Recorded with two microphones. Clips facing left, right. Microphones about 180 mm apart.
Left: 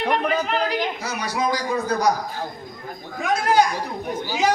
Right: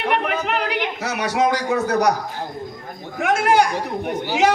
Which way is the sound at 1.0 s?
70° right (ahead or behind).